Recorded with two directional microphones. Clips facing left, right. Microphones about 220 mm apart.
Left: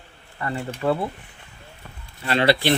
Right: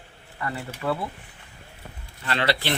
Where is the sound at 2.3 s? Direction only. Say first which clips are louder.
Left 6 dB; 15° left (ahead or behind).